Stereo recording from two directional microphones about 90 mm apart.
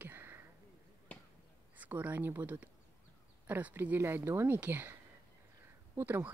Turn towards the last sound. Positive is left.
turn(degrees=-20)  # may be behind; listen again after turning